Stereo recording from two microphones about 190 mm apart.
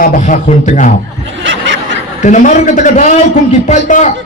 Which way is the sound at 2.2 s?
40° left (ahead or behind).